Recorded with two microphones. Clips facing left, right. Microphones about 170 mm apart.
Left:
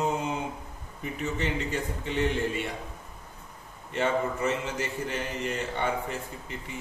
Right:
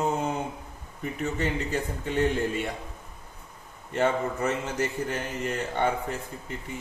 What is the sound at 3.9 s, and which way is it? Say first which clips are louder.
A man's voice: right 2 dB; 45° right (ahead or behind).